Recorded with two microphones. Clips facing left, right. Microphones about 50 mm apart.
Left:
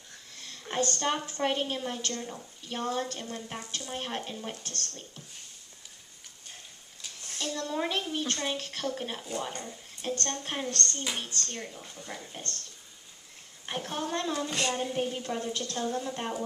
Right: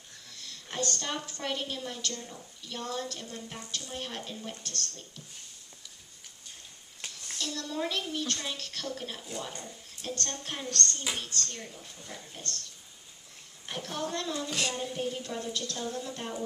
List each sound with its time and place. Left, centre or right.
0.4 s a woman's voice: left
7.3 s speech: left
13.7 s speech: left
14.5 s a sound: centre
14.8 s speech: left